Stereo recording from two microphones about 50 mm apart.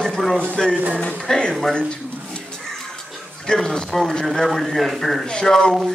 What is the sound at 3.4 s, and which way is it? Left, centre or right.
Speech, centre.